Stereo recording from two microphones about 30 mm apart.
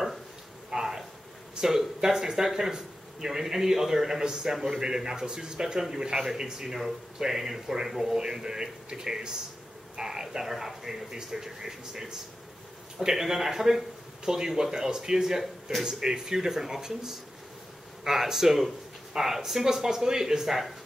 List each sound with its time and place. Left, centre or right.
0.7 s a sound: centre
1.6 s a man's voice: right
2.0 s a man's voice: centre